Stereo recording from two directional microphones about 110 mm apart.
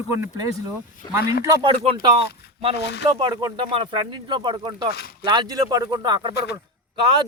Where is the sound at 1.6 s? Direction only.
50° right (ahead or behind).